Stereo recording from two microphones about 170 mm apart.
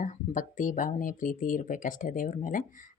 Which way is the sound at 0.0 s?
50° left (ahead or behind).